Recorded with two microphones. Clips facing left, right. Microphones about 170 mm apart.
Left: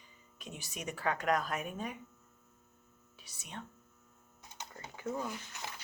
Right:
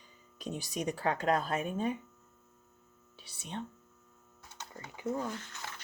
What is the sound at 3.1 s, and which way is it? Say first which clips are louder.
Speech: right 6 dB; 30° right (ahead or behind).